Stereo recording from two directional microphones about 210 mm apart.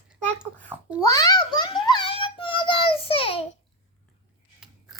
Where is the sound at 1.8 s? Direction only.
20° left (ahead or behind).